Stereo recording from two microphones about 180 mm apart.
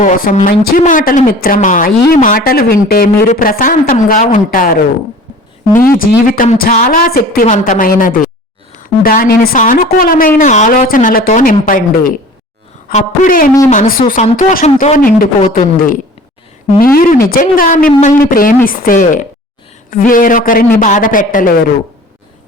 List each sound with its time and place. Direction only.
0.0 s a woman's voice: 45° left (ahead or behind)
5.8 s a woman's voice: 55° left (ahead or behind)